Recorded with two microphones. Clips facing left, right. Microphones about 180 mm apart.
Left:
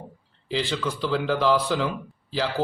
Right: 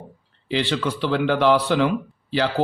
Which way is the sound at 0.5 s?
70° right (ahead or behind).